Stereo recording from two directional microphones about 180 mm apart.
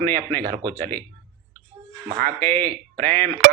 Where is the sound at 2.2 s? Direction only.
10° left (ahead or behind).